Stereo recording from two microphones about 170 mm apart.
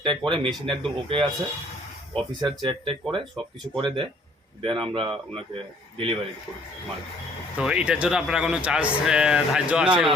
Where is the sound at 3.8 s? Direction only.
30° right (ahead or behind).